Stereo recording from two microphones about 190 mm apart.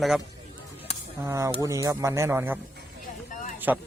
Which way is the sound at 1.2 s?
15° right (ahead or behind).